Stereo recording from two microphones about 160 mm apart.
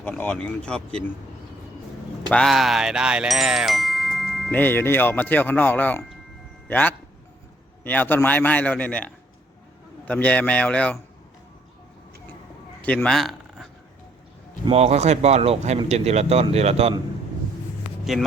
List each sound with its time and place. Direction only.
0.0 s speech: 10° left (ahead or behind)
2.3 s chime: centre (ahead or behind)
4.5 s speech: 10° left (ahead or behind)
10.1 s speech: 10° left (ahead or behind)
12.8 s a man's voice: 10° left (ahead or behind)
14.6 s speech: 40° right (ahead or behind)
18.0 s speech: centre (ahead or behind)